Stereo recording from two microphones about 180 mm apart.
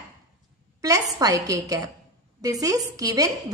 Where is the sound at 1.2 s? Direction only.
20° right (ahead or behind).